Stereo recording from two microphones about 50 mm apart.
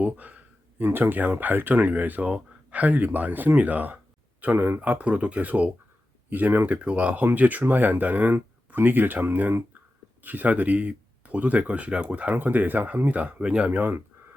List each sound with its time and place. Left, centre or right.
0.0 s a sound: right
0.9 s speech: right
4.5 s speech: right
4.8 s speech: right
6.7 s speech: right
10.2 s speech: right
12.3 s speech: right
13.7 s speech: right